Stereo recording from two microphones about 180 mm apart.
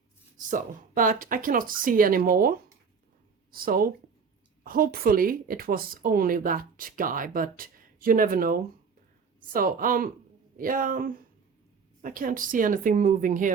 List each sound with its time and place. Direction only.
0.3 s speech: 45° right (ahead or behind)